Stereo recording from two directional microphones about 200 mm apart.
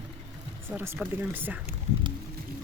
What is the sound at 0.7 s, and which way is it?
Speech, 10° right (ahead or behind).